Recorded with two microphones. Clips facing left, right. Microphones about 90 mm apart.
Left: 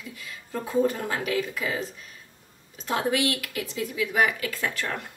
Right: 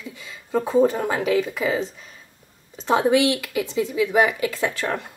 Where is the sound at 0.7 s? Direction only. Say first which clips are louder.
Right 5 dB; 30° right (ahead or behind).